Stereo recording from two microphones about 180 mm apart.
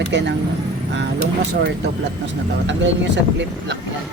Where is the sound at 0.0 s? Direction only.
80° right.